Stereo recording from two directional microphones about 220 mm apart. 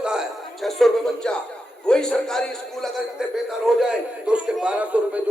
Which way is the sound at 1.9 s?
5° left (ahead or behind).